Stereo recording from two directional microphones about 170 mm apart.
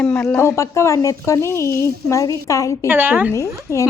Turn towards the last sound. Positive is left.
turn(degrees=15)  # may be behind; listen again after turning